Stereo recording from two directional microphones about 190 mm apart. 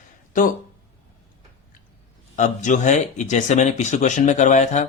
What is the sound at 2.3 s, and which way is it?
Speech, 40° left (ahead or behind).